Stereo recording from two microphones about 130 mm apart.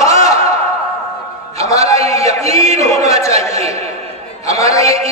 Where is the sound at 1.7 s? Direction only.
25° left (ahead or behind).